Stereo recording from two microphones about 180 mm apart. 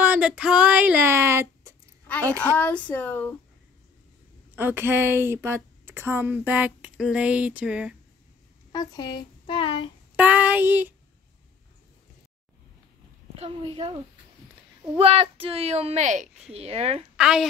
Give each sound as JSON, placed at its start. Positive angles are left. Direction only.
{"t": 0.0, "sound": "speech", "side_deg": -5}
{"t": 2.4, "sound": "speech", "side_deg": 5}
{"t": 4.6, "sound": "a woman's voice", "side_deg": -10}
{"t": 8.7, "sound": "speech", "side_deg": 20}
{"t": 10.1, "sound": "a woman's voice", "side_deg": -10}
{"t": 13.4, "sound": "a woman's voice", "side_deg": -30}
{"t": 15.0, "sound": "a woman's voice", "side_deg": -30}
{"t": 17.2, "sound": "a woman's voice", "side_deg": -5}